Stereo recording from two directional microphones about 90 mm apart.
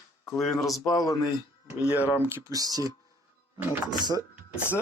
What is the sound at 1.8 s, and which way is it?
Speech, 20° right (ahead or behind).